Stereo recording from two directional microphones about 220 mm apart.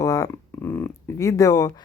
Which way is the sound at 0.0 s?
15° left (ahead or behind).